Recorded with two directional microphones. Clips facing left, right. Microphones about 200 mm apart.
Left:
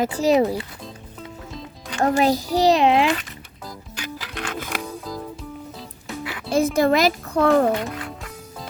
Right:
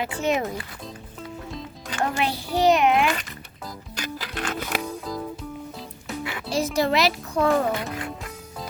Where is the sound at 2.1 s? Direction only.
40° left (ahead or behind).